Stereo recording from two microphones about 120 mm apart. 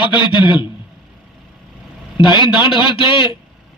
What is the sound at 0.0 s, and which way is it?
Speech, 40° left (ahead or behind).